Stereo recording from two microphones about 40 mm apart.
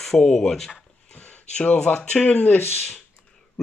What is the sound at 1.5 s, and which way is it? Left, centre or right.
Speech, left.